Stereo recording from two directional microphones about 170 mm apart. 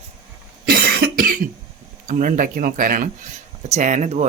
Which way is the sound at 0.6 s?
65° right (ahead or behind).